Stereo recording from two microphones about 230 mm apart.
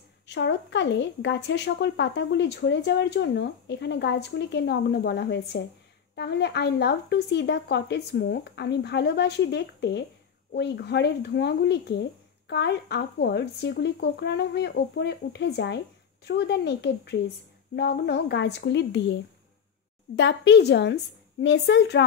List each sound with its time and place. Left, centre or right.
0.3 s speech: left
20.2 s speech: left